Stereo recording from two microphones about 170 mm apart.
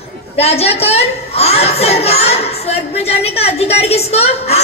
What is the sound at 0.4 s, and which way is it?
A woman's voice, 35° left (ahead or behind).